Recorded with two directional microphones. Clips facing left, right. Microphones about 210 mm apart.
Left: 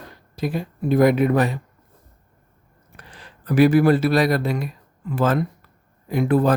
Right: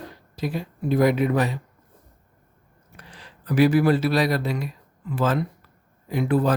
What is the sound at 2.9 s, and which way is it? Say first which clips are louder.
Speech: left 1 dB; 50° left (ahead or behind).